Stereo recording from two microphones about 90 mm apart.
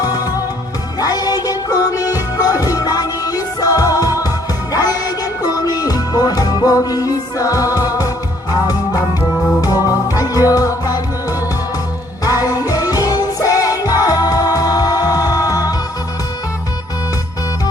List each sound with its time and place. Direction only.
0.9 s music: 45° left (ahead or behind)